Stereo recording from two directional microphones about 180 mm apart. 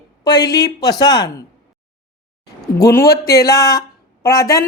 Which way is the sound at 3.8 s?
20° left (ahead or behind).